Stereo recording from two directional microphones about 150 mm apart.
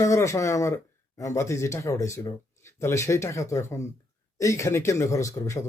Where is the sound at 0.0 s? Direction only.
20° left (ahead or behind).